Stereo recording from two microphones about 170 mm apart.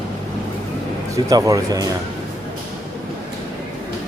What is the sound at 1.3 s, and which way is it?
Speech, 20° right (ahead or behind).